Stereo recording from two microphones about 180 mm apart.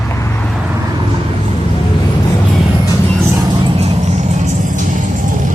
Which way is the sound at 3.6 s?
35° right (ahead or behind).